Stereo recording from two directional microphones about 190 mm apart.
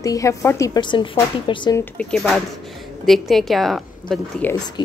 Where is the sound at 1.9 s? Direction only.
Centre (ahead or behind).